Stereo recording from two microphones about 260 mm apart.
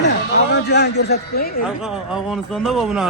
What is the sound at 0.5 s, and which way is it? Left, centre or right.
A man's voice, left.